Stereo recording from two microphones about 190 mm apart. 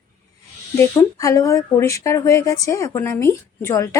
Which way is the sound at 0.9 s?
15° left (ahead or behind).